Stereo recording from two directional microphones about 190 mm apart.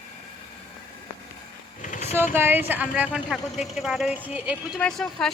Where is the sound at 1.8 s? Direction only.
40° left (ahead or behind).